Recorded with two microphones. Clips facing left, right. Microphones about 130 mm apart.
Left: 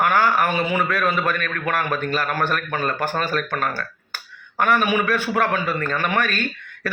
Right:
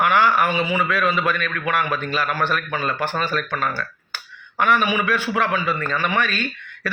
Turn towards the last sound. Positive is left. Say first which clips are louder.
# left 1 dB
turn(degrees=50)  # may be behind; listen again after turning